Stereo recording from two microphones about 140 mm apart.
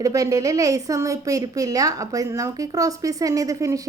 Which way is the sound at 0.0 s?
25° right (ahead or behind).